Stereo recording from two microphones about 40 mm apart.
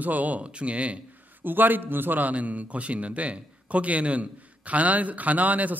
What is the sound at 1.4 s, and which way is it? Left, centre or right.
A man's voice, right.